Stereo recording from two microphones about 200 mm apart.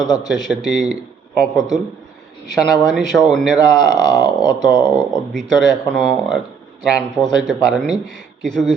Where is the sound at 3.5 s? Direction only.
20° left (ahead or behind).